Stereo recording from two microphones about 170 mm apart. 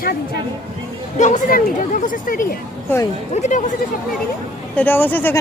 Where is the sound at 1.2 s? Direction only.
50° left (ahead or behind).